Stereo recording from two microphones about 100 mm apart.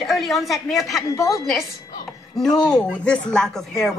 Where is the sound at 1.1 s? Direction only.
35° left (ahead or behind).